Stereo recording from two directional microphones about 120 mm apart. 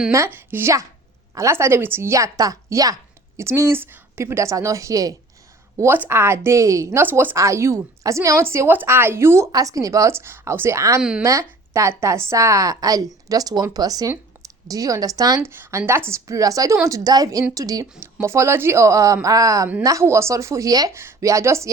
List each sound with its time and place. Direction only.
0.3 s a woman's voice: 20° right (ahead or behind)
15.4 s a woman's voice: 20° right (ahead or behind)